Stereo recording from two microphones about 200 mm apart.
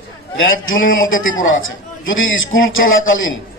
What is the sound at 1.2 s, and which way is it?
Speech, 80° left.